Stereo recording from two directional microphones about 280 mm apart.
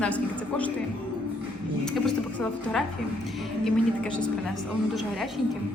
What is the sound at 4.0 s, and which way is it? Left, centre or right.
A woman's voice, centre.